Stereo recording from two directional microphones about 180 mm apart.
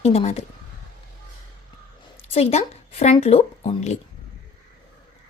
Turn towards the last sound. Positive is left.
turn(degrees=35)  # may be behind; listen again after turning